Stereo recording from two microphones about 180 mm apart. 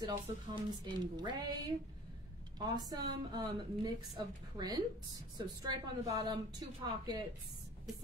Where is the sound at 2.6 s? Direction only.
20° right (ahead or behind).